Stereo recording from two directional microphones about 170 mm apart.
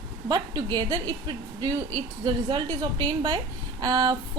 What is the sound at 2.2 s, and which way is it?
A woman's voice, 25° right (ahead or behind).